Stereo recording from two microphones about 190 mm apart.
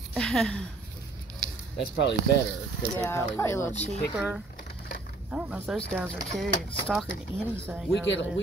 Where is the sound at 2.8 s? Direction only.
10° left (ahead or behind).